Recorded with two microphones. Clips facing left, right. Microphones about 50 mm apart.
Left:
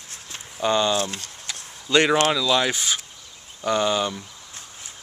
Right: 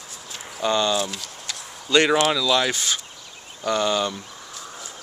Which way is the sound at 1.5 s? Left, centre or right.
Centre.